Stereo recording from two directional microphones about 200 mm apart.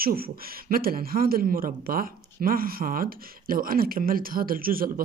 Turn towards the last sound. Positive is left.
turn(degrees=-45)  # may be behind; listen again after turning